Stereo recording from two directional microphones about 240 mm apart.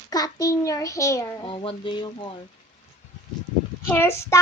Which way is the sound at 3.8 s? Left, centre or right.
Centre.